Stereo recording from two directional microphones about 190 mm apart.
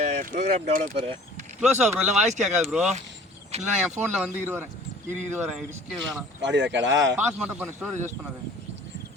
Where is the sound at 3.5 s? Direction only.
35° right (ahead or behind).